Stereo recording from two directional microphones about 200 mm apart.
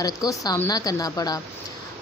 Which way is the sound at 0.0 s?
15° left (ahead or behind).